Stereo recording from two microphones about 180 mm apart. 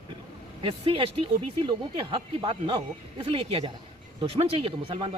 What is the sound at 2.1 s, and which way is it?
A man's voice, 25° right (ahead or behind).